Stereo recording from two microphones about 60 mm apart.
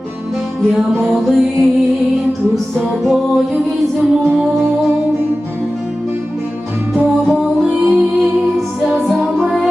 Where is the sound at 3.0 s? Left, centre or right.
Centre.